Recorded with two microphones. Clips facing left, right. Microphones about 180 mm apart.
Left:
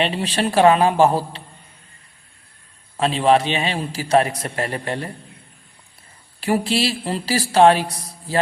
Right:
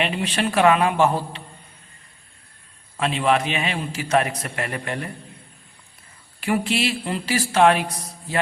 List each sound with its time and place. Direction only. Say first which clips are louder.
0.0 s a man's voice: left 2 dB; 35° left (ahead or behind)
3.0 s a man's voice: left 4 dB; 35° left (ahead or behind)
6.4 s a man's voice: left 2 dB; 35° left (ahead or behind)